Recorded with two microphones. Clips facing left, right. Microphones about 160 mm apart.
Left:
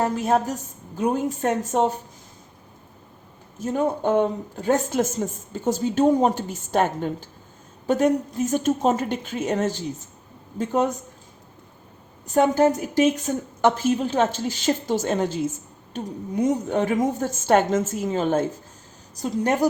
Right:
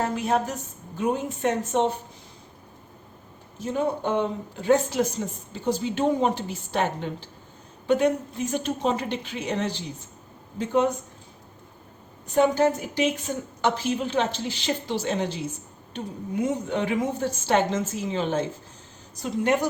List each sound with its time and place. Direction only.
0.0 s speech: 40° left (ahead or behind)
3.6 s speech: 45° left (ahead or behind)
12.3 s a woman's voice: 45° left (ahead or behind)